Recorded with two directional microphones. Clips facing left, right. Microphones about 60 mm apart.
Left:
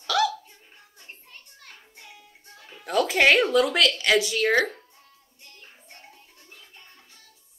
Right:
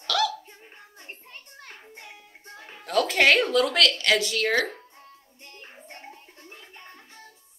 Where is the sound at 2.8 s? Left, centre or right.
Centre.